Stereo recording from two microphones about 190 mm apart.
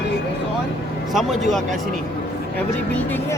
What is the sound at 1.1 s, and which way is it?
Speech, centre (ahead or behind).